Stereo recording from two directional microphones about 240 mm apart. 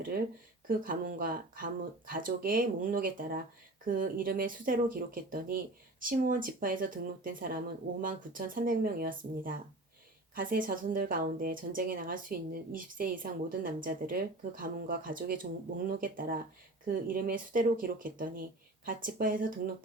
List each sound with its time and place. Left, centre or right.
0.7 s speech: right